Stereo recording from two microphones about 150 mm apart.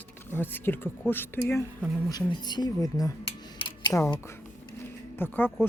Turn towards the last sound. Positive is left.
turn(degrees=15)  # may be behind; listen again after turning